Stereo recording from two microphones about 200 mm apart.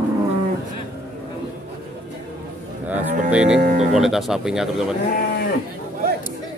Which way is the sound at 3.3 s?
5° right (ahead or behind).